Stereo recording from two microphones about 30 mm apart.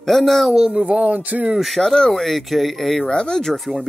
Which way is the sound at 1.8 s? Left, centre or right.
Centre.